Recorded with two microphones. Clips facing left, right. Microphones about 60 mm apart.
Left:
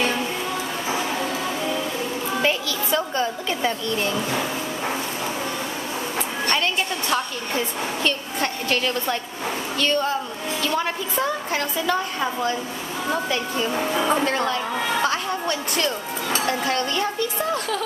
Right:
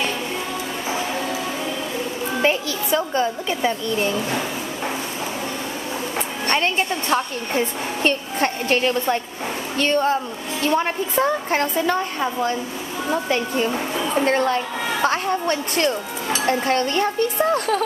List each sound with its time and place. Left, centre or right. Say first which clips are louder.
2.4 s a sound: right 3 dB; right
2.9 s a woman's voice: right 3 dB; centre
6.4 s a woman's voice: right 3 dB; right
14.2 s a woman's voice: right 4 dB; right
15.0 s a sound: right 3 dB; right
16.4 s a woman's voice: right 6 dB; right